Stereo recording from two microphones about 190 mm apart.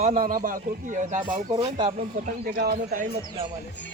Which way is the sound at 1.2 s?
25° right (ahead or behind).